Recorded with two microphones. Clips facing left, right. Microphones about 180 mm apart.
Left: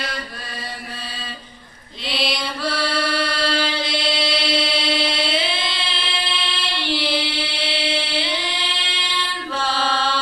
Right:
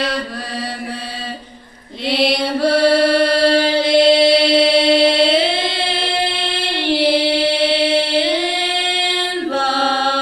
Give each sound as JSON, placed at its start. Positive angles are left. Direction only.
{"t": 2.0, "sound": "mantra", "side_deg": -60}